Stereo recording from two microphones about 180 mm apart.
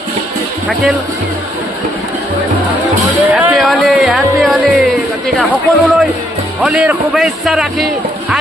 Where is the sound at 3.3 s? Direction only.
5° right (ahead or behind).